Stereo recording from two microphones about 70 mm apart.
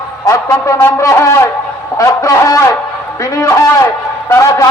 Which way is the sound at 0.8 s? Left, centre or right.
Left.